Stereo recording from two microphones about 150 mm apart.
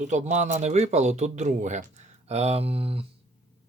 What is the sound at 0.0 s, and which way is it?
Speech, 50° right (ahead or behind).